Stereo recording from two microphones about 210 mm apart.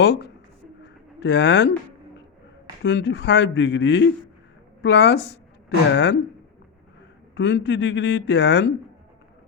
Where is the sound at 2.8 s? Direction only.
55° left (ahead or behind).